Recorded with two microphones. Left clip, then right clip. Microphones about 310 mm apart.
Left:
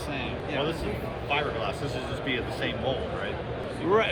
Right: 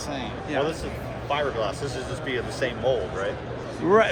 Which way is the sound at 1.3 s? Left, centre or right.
Right.